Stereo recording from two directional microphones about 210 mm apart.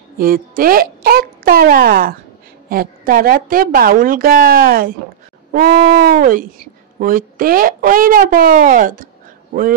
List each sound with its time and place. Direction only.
0.2 s a woman's voice: 45° right (ahead or behind)